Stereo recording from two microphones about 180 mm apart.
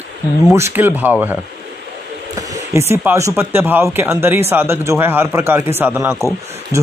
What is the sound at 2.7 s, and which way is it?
Speech, 15° right (ahead or behind).